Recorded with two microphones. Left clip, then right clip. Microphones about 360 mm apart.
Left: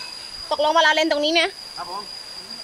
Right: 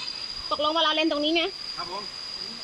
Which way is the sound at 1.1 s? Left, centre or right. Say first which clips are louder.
Left 5 dB; left.